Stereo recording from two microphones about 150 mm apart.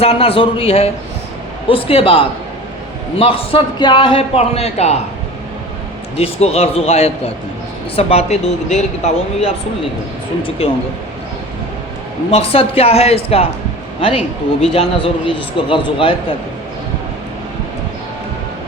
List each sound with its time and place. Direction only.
0.0 s a man's voice: 40° left (ahead or behind)
6.1 s speech: 40° left (ahead or behind)
10.6 s a man's voice: 40° left (ahead or behind)
12.3 s a man's voice: 40° left (ahead or behind)
14.6 s a man's voice: 40° left (ahead or behind)